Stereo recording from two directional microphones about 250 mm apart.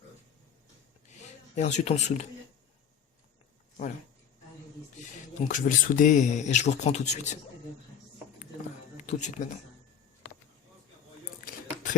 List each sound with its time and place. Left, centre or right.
1.5 s speech: left
4.9 s speech: left
9.0 s speech: left
11.3 s a sound: left